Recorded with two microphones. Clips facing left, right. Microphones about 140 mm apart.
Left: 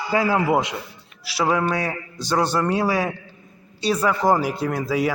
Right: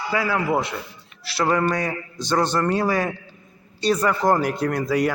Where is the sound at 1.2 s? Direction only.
10° left (ahead or behind).